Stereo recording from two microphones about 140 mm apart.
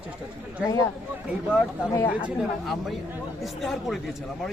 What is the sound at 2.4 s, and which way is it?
Speech, centre (ahead or behind).